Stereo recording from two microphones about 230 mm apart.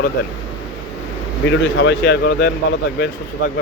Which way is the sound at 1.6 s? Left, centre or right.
Left.